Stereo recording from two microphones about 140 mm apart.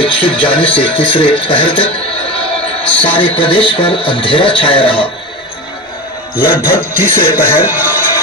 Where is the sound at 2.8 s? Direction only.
10° left (ahead or behind).